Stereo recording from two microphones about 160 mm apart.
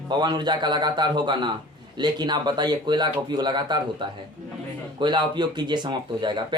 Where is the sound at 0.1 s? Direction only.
25° right (ahead or behind).